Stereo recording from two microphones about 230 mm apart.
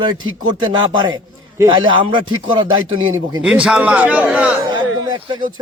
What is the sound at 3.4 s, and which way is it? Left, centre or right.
A man's voice, centre.